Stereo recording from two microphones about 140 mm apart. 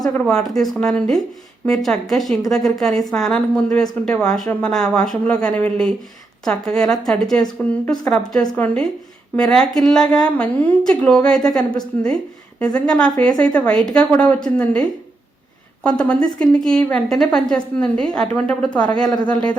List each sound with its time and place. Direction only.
0.1 s a woman's voice: 5° left (ahead or behind)
12.8 s a woman's voice: 5° left (ahead or behind)
19.0 s a woman's voice: 30° left (ahead or behind)